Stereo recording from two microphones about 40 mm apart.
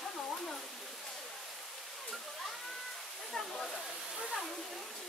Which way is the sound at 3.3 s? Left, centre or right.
Centre.